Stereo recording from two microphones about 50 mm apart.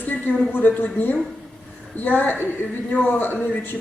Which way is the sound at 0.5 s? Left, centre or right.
Left.